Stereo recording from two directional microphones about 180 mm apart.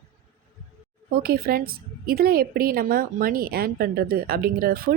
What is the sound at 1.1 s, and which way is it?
A woman's voice, 55° right (ahead or behind).